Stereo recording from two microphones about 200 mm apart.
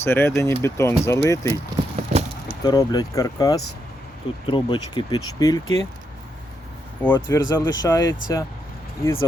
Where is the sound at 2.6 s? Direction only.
20° left (ahead or behind).